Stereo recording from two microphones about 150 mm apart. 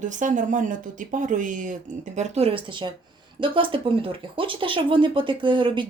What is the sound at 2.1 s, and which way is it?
Speech, 50° right (ahead or behind).